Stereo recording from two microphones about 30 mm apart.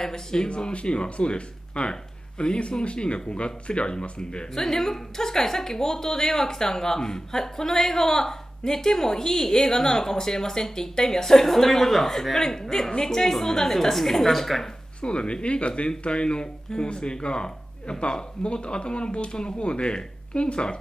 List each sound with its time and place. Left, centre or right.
0.0 s speech: left
0.6 s speech: left
4.6 s a woman's voice: centre
15.0 s speech: left